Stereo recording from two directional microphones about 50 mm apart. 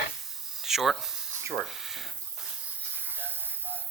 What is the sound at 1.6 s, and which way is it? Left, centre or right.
Speech, centre.